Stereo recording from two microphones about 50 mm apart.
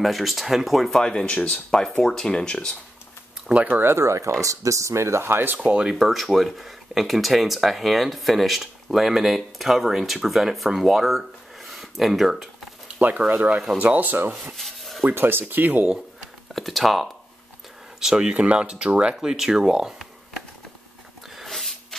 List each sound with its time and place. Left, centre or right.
0.0 s speech: centre; by 1.5 s left
1.5 s speech: centre
3.4 s speech: right
3.8 s speech: right
5.9 s speech: centre
13.0 s speech: right
14.6 s a sound: centre
15.0 s speech: right
16.2 s a sound: centre
18.0 s speech: centre
19.1 s speech: centre
21.5 s a sound: centre